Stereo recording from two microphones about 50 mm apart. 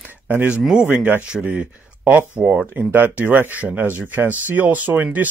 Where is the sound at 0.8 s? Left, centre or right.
Right.